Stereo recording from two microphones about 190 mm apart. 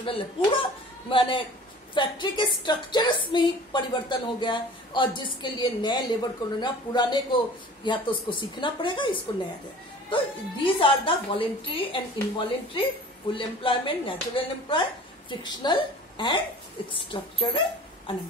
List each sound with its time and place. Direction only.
0.0 s a woman's voice: 30° left (ahead or behind)